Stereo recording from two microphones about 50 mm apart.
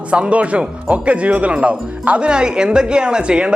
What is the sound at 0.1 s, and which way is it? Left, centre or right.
Speech, right.